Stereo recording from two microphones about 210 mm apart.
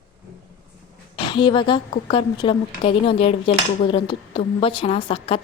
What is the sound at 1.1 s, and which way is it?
A woman's voice, 25° left (ahead or behind).